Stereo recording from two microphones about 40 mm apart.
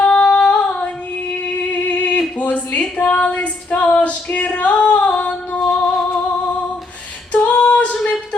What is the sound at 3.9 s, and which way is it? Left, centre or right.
Music, left.